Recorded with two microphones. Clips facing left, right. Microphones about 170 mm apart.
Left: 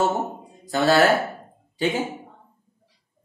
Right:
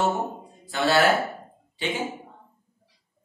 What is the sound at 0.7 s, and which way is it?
Speech, 40° left (ahead or behind).